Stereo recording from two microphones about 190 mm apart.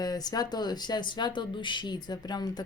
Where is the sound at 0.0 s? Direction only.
20° left (ahead or behind).